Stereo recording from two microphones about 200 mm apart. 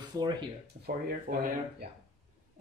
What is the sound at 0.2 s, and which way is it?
Speech, 20° right (ahead or behind).